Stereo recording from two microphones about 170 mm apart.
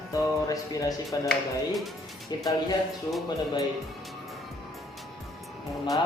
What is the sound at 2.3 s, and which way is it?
Speech, 25° left (ahead or behind).